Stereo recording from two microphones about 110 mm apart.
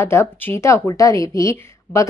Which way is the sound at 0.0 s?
25° left (ahead or behind).